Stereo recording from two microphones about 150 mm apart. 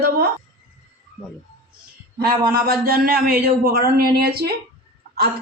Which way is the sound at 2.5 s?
90° right.